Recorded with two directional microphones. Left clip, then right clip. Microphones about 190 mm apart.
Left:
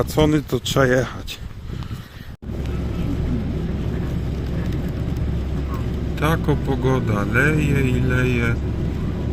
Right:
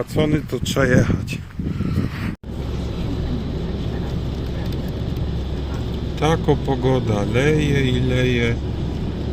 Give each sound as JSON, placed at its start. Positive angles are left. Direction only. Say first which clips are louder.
{"t": 0.0, "sound": "speech", "louder": "left 2 dB", "side_deg": 5}
{"t": 6.3, "sound": "a man's voice", "louder": "right 3 dB", "side_deg": 15}
{"t": 6.9, "sound": "speech", "louder": "even", "side_deg": 5}
{"t": 7.6, "sound": "speech", "louder": "right 2 dB", "side_deg": -50}